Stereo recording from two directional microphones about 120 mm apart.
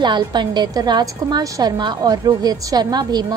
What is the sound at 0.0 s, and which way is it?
A woman's voice, 40° right (ahead or behind).